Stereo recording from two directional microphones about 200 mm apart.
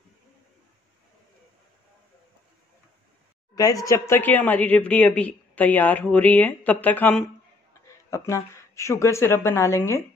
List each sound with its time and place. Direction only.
3.5 s a woman's voice: 20° left (ahead or behind)